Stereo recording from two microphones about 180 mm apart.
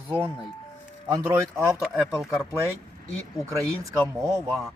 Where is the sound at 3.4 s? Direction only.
20° right (ahead or behind).